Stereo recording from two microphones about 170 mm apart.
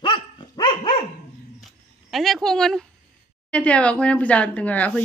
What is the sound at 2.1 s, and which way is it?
Speech, centre (ahead or behind).